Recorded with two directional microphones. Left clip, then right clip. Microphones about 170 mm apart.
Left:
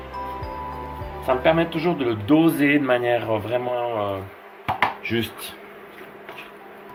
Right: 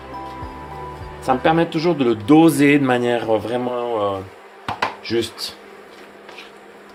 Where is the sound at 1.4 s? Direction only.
75° right (ahead or behind).